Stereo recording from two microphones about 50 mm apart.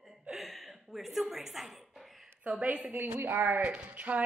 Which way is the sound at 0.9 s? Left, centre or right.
Centre.